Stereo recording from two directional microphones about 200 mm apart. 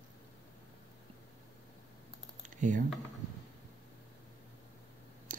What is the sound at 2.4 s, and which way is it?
Typing, 40° right (ahead or behind).